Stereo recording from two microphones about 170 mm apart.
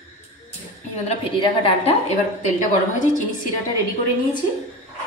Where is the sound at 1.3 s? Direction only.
35° left (ahead or behind).